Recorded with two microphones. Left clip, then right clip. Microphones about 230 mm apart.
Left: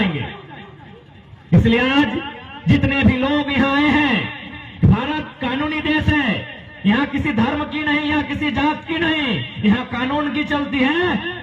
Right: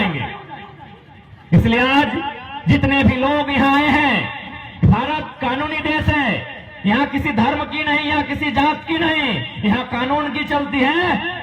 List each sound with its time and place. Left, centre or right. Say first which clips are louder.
1.5 s a man's voice: right 1 dB; right
4.8 s a sound: right 2 dB; right
6.8 s a man's voice: right 1 dB; right